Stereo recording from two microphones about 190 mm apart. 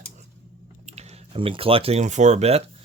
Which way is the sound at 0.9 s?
35° right (ahead or behind).